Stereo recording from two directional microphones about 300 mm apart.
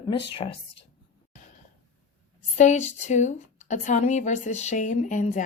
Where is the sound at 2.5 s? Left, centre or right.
Left.